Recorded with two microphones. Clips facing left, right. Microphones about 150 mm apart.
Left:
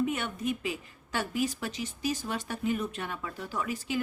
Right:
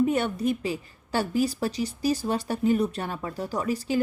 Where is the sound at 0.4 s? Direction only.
35° right (ahead or behind).